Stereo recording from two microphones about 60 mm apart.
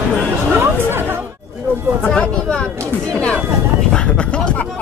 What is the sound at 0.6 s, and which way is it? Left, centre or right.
Speech, right.